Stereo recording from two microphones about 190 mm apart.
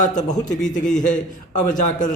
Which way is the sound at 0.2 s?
40° left (ahead or behind).